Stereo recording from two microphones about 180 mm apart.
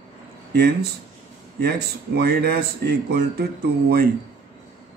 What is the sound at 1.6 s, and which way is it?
A man's voice, 60° right (ahead or behind).